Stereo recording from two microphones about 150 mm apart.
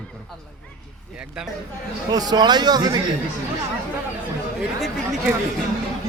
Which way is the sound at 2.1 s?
25° right (ahead or behind).